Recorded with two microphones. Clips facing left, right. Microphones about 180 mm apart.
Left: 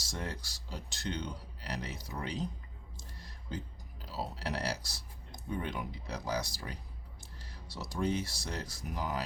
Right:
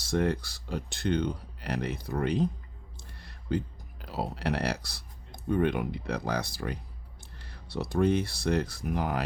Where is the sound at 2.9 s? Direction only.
60° right (ahead or behind).